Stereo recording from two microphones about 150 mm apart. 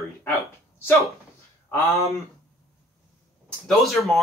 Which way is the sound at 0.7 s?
15° left (ahead or behind).